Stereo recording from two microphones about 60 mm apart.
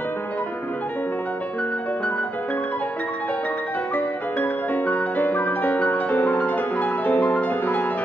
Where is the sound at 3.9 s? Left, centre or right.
Left.